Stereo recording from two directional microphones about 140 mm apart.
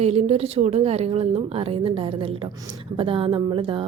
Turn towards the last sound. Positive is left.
turn(degrees=-40)  # may be behind; listen again after turning